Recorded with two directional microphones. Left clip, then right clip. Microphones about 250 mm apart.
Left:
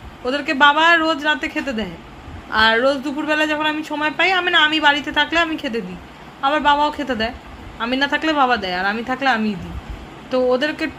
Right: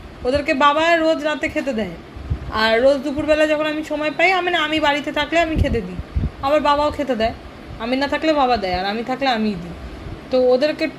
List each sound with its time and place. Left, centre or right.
0.3 s speech: centre
10.6 s speech: centre